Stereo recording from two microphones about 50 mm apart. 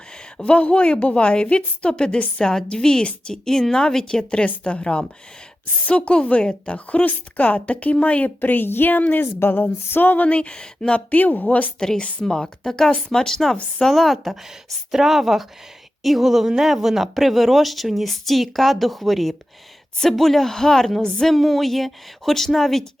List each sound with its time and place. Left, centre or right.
0.4 s a woman's voice: left
9.4 s a sound: left
9.9 s a woman's voice: left
10.2 s a woman's voice: left
11.1 s a woman's voice: left
11.8 s speech: centre
21.3 s speech: centre